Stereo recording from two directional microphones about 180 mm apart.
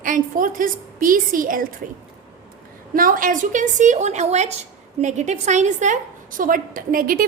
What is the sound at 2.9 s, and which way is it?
A woman's voice, 50° right (ahead or behind).